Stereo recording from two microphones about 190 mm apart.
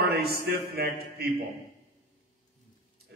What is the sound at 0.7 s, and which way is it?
Speech, 55° right (ahead or behind).